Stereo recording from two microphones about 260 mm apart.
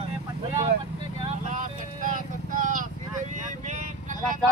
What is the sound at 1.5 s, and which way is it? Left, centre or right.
Vehicle, right.